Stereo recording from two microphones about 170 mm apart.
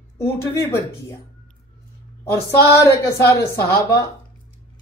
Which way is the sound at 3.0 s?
20° left (ahead or behind).